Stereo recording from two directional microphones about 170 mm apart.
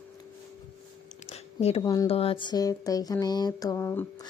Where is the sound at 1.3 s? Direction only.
40° left (ahead or behind).